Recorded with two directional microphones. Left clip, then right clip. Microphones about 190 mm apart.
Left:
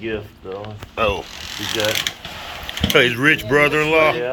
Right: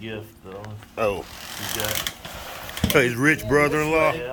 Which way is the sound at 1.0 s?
20° right (ahead or behind).